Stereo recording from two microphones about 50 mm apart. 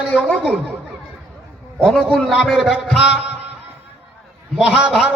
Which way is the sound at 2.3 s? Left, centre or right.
Centre.